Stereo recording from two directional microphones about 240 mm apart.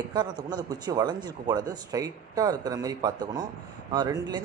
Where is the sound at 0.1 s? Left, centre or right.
Centre.